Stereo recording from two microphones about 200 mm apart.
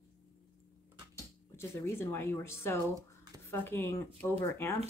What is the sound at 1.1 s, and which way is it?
A woman's voice, 10° left (ahead or behind).